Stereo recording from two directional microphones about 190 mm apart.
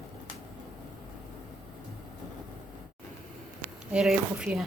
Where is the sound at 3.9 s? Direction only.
5° right (ahead or behind).